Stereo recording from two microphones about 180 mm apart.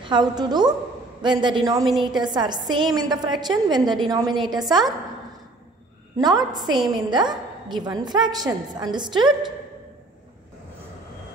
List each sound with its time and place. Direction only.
0.0 s a woman's voice: 25° right (ahead or behind)
6.1 s a woman's voice: 20° right (ahead or behind)
6.6 s a woman's voice: centre (ahead or behind)
7.0 s a woman's voice: 25° right (ahead or behind)